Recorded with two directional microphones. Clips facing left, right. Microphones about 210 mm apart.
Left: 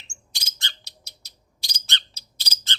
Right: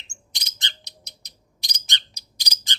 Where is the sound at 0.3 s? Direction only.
20° right (ahead or behind).